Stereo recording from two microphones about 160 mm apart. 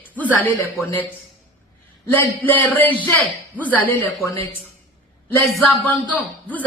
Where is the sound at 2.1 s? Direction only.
10° left (ahead or behind).